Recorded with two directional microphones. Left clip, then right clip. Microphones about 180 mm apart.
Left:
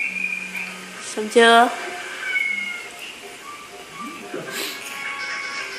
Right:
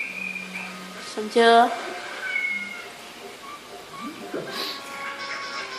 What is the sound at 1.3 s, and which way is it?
Speech, 15° left (ahead or behind).